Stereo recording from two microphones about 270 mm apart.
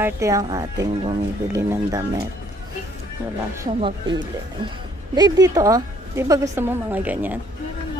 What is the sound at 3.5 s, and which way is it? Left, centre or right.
Speech, centre.